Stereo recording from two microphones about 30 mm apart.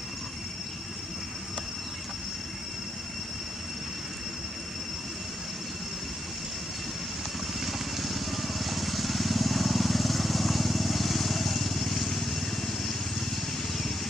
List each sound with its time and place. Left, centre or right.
7.6 s vehicle: centre